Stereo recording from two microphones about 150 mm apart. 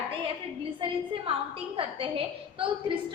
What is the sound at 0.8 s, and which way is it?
A woman's voice, 35° right (ahead or behind).